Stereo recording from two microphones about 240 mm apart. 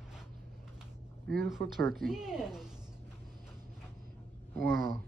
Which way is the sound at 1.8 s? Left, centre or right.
Centre.